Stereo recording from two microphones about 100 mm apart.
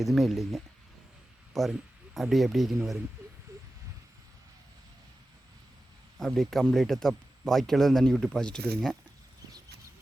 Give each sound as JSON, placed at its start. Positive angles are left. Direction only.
{"t": 0.0, "sound": "speech", "side_deg": 0}
{"t": 3.5, "sound": "vehicle", "side_deg": -30}
{"t": 6.1, "sound": "speech", "side_deg": 5}